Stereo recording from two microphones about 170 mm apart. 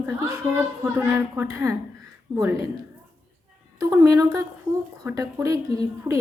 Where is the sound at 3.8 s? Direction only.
20° right (ahead or behind).